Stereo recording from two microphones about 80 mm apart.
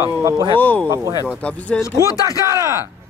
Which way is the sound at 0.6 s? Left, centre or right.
Centre.